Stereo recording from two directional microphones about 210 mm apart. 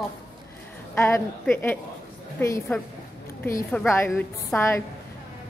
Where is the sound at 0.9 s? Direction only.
15° left (ahead or behind).